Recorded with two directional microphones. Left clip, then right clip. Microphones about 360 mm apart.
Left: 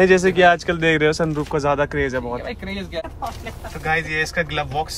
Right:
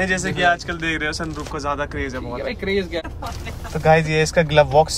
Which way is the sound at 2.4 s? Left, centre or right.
Centre.